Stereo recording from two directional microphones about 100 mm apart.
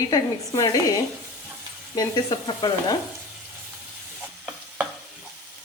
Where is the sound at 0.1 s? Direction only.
35° left (ahead or behind).